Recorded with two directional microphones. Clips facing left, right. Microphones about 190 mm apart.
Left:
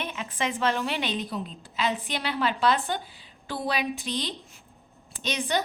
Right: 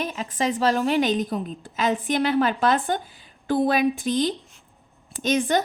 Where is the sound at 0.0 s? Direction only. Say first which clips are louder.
Right 5 dB; 40° right (ahead or behind).